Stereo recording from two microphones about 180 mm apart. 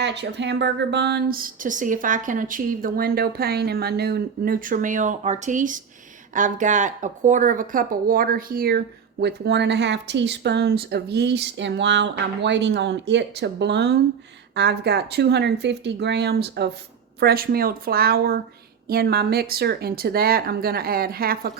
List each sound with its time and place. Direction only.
0.0 s speech: 70° right (ahead or behind); by 8.8 s 55° right (ahead or behind)
9.2 s speech: 70° right (ahead or behind); by 21.5 s 55° right (ahead or behind)